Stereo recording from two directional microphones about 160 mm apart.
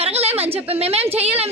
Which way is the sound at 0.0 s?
40° right (ahead or behind).